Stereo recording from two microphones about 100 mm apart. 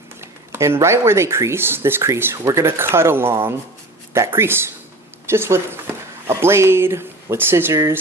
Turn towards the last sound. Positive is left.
turn(degrees=-25)  # may be behind; listen again after turning